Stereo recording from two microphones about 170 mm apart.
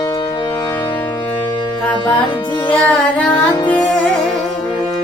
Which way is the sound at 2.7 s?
5° left (ahead or behind).